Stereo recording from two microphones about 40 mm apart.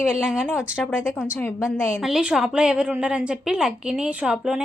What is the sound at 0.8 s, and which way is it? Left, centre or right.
Speech, centre.